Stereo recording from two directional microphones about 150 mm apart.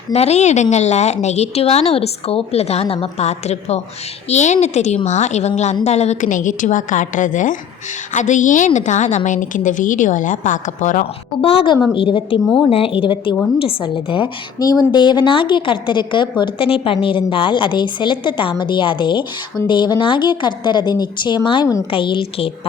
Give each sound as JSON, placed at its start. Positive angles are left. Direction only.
{"t": 0.1, "sound": "a woman's voice", "side_deg": 45}
{"t": 11.3, "sound": "a woman's voice", "side_deg": 35}